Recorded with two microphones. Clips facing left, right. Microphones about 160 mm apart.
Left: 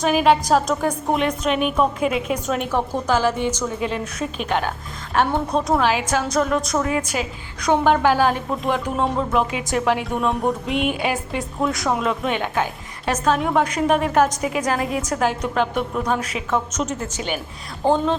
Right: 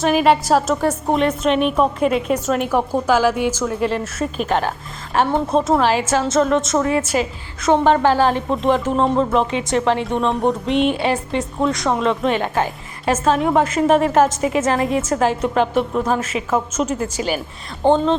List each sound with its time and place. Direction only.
0.0 s a woman's voice: centre (ahead or behind)
2.5 s a woman's voice: 5° right (ahead or behind)
5.5 s a woman's voice: 25° right (ahead or behind)
5.7 s a woman's voice: centre (ahead or behind)